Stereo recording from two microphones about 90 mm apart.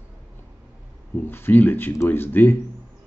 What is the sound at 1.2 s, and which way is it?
Speech, 25° left (ahead or behind).